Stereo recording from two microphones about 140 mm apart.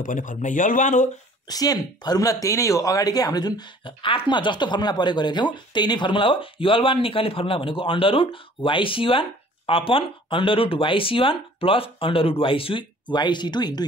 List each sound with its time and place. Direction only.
0.0 s speech: 70° left (ahead or behind)
1.5 s speech: 25° left (ahead or behind)